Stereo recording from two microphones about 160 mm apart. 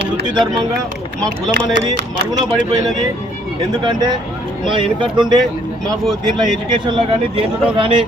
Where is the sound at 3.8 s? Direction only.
25° right (ahead or behind).